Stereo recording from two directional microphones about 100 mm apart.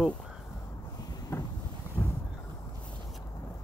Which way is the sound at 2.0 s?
15° left (ahead or behind).